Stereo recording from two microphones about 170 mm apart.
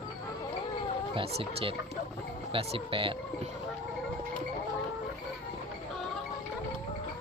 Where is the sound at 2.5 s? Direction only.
30° right (ahead or behind).